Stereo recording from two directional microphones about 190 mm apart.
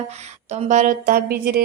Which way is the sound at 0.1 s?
35° right (ahead or behind).